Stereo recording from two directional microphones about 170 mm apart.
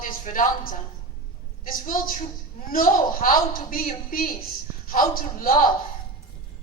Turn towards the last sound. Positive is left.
turn(degrees=55)  # may be behind; listen again after turning